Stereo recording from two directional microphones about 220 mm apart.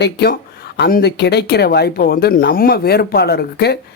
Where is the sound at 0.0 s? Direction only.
45° left (ahead or behind).